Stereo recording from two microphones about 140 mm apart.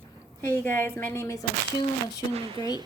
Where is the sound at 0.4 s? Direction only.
15° left (ahead or behind).